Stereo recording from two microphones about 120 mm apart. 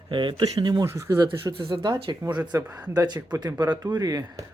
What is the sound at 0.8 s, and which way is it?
Speech, 25° right (ahead or behind).